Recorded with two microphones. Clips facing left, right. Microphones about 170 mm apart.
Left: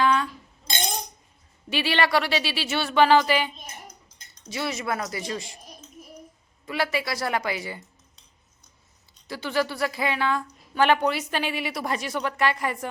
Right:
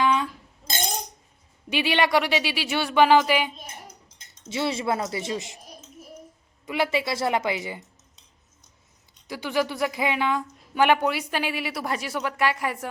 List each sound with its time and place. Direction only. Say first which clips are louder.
0.0 s chink: even; 20° right (ahead or behind)
1.7 s a woman's voice: right 1 dB; 15° right (ahead or behind)
3.8 s a sound: even; 25° right (ahead or behind)
6.7 s speech: right 2 dB; 20° right (ahead or behind)
9.2 s a woman's voice: right 1 dB; 15° right (ahead or behind)